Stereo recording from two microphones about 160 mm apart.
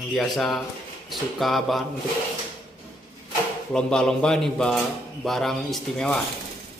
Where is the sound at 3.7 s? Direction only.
5° left (ahead or behind).